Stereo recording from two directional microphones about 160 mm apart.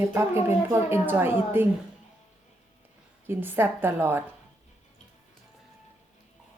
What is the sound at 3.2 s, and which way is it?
Speech, 15° right (ahead or behind).